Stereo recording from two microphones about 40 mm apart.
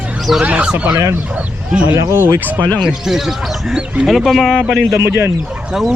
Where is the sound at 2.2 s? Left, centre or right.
Right.